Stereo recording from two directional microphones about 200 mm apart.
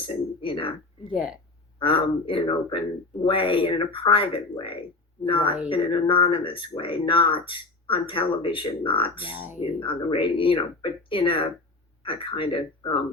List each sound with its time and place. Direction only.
0.0 s a sound: 25° left (ahead or behind)
1.8 s speech: 25° left (ahead or behind)
9.3 s speech: 10° right (ahead or behind)
9.6 s speech: 25° left (ahead or behind)